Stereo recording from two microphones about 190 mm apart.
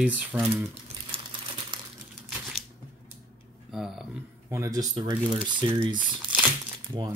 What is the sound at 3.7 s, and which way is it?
Speech, centre (ahead or behind).